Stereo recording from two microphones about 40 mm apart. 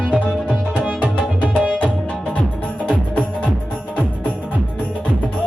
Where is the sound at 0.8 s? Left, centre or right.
Right.